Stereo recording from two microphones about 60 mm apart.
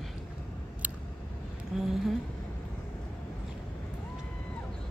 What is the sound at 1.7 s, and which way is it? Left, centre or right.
Speech, centre.